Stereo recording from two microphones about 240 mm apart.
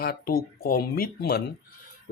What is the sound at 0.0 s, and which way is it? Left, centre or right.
Speech, left.